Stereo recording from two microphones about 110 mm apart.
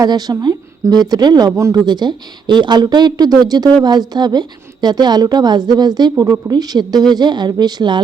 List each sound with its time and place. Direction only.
0.0 s a woman's voice: 35° right (ahead or behind)